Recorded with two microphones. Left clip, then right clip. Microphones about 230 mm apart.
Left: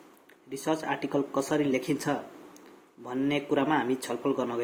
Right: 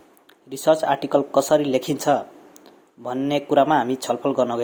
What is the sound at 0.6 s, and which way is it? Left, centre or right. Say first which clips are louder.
Speech: right 12 dB; right.